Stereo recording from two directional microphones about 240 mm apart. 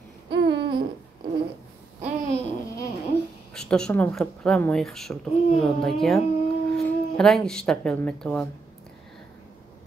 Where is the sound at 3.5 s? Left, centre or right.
Centre.